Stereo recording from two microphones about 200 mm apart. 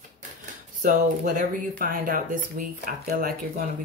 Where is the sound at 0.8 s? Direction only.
40° right (ahead or behind).